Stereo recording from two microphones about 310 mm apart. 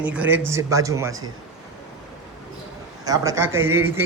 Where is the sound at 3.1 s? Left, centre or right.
Centre.